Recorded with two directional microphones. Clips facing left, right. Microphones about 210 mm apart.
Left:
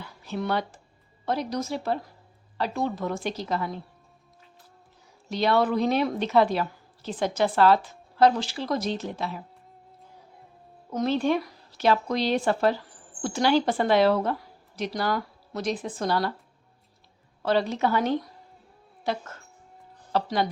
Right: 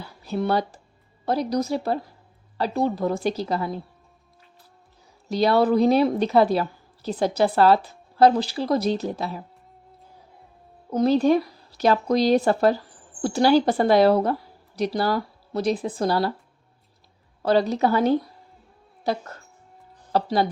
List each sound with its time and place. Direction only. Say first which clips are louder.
0.0 s a sound: right 5 dB; 35° right (ahead or behind)
1.2 s a woman's voice: right 5 dB; 35° right (ahead or behind)
5.3 s a woman's voice: right 4 dB; 35° right (ahead or behind)
10.9 s a woman's voice: right 6 dB; 40° right (ahead or behind)
17.4 s a woman's voice: right 4 dB; 40° right (ahead or behind)